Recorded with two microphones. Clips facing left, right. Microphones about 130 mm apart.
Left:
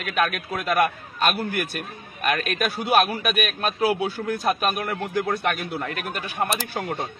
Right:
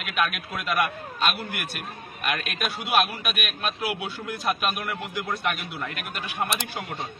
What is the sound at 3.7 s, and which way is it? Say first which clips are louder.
Speech: left 8 dB; 30° left (ahead or behind).